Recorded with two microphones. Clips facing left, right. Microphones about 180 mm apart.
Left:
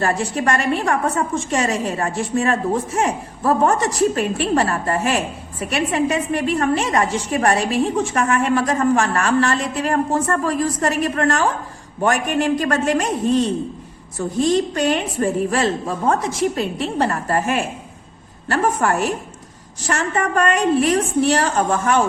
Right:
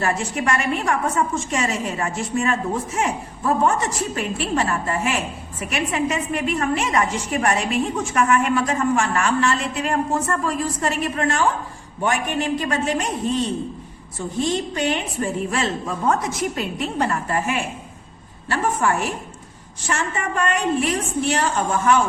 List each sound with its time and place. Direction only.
0.0 s a woman's voice: 35° left (ahead or behind)
14.4 s a woman's voice: 40° left (ahead or behind)
20.1 s a woman's voice: 45° left (ahead or behind)